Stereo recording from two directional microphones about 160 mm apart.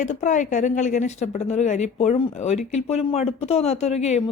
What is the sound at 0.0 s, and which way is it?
A woman's voice, 50° left (ahead or behind).